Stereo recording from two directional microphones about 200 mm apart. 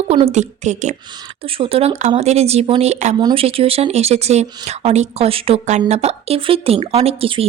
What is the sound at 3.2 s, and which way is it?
Speech, 25° right (ahead or behind).